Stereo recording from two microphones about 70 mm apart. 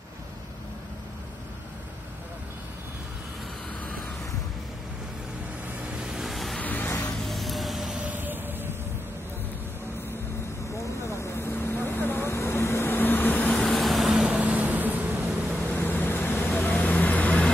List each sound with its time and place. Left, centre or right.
6.0 s vehicle: centre
6.6 s music: left
6.9 s music: left
7.2 s spray: centre
8.0 s a sound: right
10.8 s vehicle: left
13.6 s vehicle: centre
14.4 s vehicle: right
15.7 s vehicle: left